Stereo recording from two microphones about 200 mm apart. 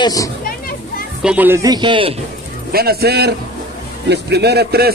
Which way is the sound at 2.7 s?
50° right (ahead or behind).